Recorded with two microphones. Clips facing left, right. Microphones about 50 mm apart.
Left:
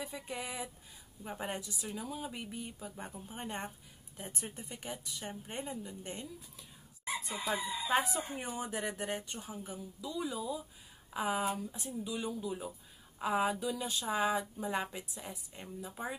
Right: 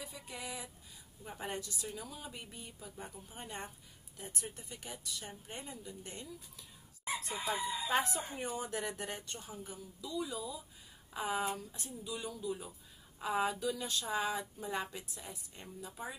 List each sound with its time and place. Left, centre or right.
0.0 s speech: left
7.9 s speech: centre
11.1 s speech: centre; by 16.2 s left